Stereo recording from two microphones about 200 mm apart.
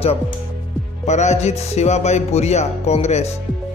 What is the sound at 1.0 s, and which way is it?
A man's voice, 35° left (ahead or behind).